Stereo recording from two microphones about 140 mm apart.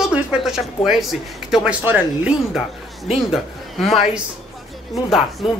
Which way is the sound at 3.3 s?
Centre (ahead or behind).